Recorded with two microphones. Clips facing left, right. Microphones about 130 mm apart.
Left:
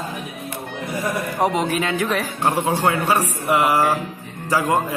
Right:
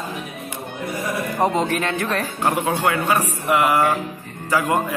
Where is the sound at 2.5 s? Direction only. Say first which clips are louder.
Left 2 dB; 30° left (ahead or behind).